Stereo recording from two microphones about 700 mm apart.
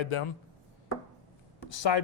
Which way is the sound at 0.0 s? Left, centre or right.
Left.